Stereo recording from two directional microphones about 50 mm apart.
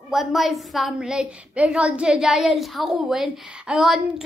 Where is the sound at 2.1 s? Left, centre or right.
Centre.